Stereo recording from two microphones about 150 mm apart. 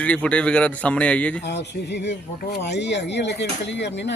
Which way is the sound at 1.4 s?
90° left.